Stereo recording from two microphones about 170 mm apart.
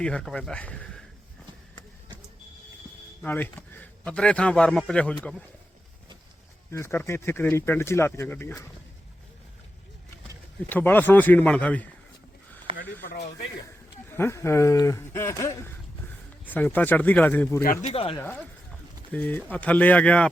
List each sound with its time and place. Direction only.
0.0 s speech: 5° left (ahead or behind)
3.2 s a man's voice: 10° left (ahead or behind)
6.7 s speech: 15° left (ahead or behind)
10.7 s speech: 10° left (ahead or behind)
12.7 s a sound: 30° right (ahead or behind)
14.1 s speech: 15° left (ahead or behind)
17.8 s speech: 35° left (ahead or behind)
19.1 s speech: 10° left (ahead or behind)